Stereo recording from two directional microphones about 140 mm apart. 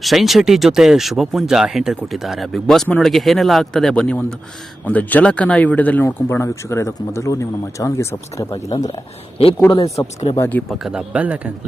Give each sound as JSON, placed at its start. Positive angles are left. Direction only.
{"t": 0.0, "sound": "speech", "side_deg": 0}
{"t": 9.4, "sound": "speech", "side_deg": 45}
{"t": 9.7, "sound": "speech", "side_deg": 20}
{"t": 10.7, "sound": "a man's voice", "side_deg": -5}